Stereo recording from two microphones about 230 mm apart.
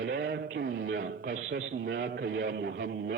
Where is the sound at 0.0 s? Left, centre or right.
Right.